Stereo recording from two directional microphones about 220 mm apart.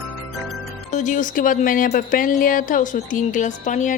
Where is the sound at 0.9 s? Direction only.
35° left (ahead or behind).